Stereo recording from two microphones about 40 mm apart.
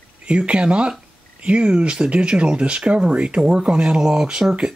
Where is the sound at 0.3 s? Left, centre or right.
Right.